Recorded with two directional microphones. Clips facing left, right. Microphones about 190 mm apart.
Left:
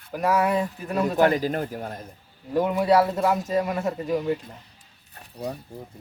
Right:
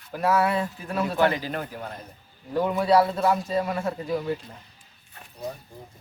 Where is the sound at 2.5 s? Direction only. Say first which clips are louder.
Left 2 dB; 10° left (ahead or behind).